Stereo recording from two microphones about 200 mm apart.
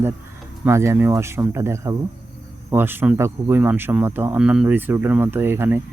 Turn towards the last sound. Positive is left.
turn(degrees=-10)  # may be behind; listen again after turning